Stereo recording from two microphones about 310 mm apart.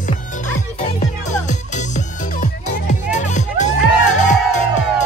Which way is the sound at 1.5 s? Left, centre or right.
Left.